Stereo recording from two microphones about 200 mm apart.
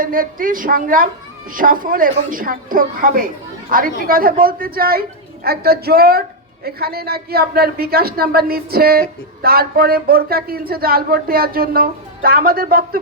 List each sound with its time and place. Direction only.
0.0 s speech: 45° right (ahead or behind)